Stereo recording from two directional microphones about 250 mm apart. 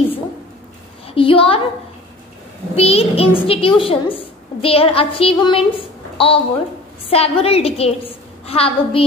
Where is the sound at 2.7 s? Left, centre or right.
Left.